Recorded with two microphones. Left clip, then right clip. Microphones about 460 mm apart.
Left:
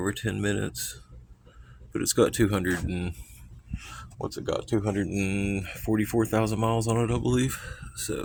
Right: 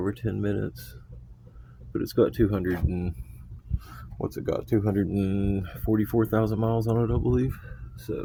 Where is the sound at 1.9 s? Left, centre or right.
Right.